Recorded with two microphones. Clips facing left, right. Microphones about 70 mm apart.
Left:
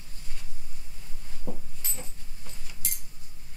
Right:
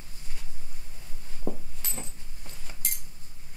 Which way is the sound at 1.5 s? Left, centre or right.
Right.